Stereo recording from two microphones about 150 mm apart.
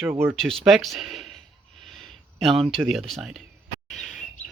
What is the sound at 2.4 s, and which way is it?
Speech, 40° right (ahead or behind).